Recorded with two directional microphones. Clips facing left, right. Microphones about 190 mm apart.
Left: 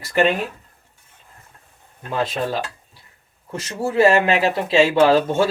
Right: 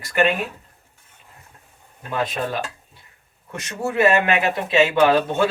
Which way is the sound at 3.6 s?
30° left (ahead or behind).